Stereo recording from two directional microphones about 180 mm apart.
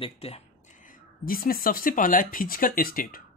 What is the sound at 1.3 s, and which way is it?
Speech, 55° left (ahead or behind).